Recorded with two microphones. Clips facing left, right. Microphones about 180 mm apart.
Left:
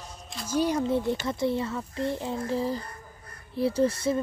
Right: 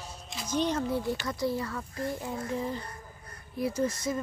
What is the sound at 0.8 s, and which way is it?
A woman's voice, 25° left (ahead or behind).